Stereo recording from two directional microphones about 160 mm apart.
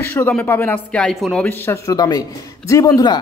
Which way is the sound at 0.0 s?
15° left (ahead or behind).